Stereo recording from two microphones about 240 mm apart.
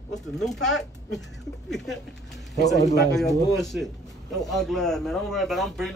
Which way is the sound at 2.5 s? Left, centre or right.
Left.